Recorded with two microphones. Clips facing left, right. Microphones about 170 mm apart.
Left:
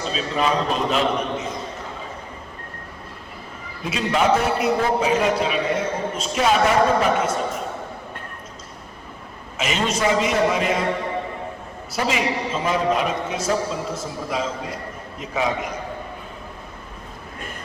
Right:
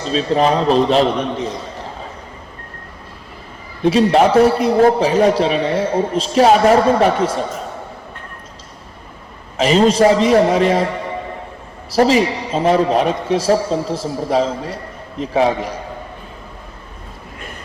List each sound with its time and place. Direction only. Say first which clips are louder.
0.1 s a man's voice: right 8 dB; 35° right (ahead or behind)
3.8 s a man's voice: right 8 dB; 35° right (ahead or behind)
9.6 s a man's voice: right 11 dB; 35° right (ahead or behind)
11.9 s a man's voice: right 9 dB; 35° right (ahead or behind)